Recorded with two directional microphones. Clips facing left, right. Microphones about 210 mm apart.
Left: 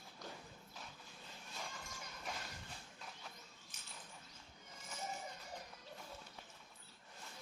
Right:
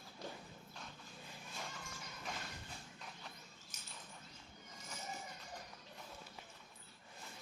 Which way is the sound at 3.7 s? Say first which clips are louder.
Right 2 dB; 40° right (ahead or behind).